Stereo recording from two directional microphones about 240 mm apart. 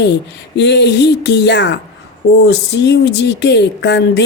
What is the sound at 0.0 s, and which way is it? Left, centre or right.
Speech, left.